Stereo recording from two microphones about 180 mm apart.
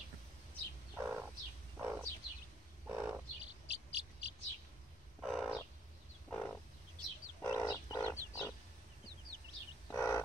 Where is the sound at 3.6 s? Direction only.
70° left (ahead or behind).